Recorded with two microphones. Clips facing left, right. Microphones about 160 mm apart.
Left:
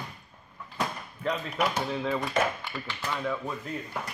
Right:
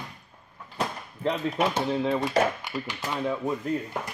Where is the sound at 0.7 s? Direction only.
30° right (ahead or behind).